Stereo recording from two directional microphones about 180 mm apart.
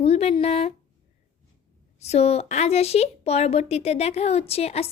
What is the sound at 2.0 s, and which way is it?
A woman's voice, 35° left (ahead or behind).